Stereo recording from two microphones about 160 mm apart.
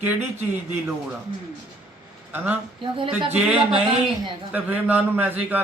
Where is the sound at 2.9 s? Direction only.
35° right (ahead or behind).